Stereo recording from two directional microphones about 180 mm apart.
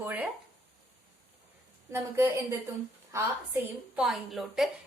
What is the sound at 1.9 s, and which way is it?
A woman's voice, 15° right (ahead or behind).